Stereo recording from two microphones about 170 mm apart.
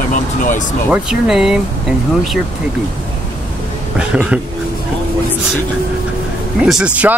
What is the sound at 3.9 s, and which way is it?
Speech, 5° right (ahead or behind).